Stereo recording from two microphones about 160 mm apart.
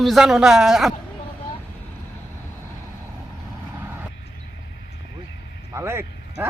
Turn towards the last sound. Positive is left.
turn(degrees=-10)  # may be behind; listen again after turning